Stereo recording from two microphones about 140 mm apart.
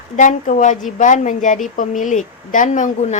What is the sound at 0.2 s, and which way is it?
A woman's voice, 65° left (ahead or behind).